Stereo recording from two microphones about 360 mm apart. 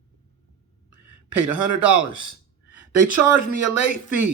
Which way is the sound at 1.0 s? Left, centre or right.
Right.